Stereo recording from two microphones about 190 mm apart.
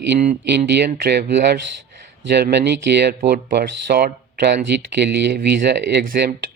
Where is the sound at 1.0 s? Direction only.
60° right (ahead or behind).